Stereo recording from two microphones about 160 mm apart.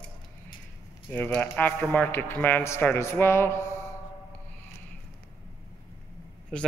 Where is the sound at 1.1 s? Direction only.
10° left (ahead or behind).